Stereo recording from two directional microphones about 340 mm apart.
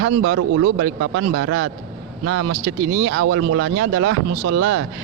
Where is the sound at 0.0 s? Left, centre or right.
Right.